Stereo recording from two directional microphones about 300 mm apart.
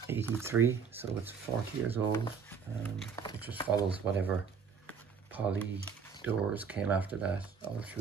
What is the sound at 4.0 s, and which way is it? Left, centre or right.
Speech, centre.